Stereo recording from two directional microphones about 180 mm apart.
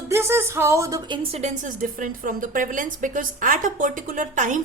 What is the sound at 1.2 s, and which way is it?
A woman's voice, 35° right (ahead or behind).